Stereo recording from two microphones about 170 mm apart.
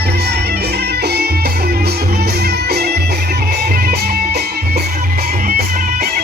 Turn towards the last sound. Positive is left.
turn(degrees=-60)  # may be behind; listen again after turning